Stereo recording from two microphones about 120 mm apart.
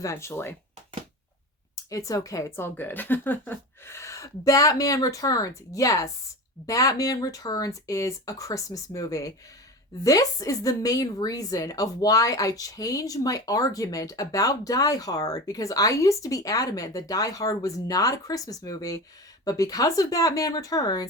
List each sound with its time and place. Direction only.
0.0 s a woman's voice: 25° left (ahead or behind)
1.7 s a woman's voice: 30° left (ahead or behind)